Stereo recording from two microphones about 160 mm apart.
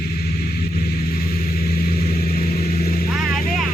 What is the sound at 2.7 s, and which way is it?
Vehicle, 70° left (ahead or behind).